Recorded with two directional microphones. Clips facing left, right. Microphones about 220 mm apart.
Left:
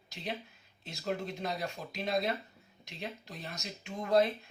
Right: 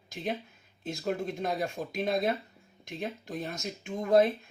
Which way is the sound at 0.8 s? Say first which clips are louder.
Right 4 dB; 50° right (ahead or behind).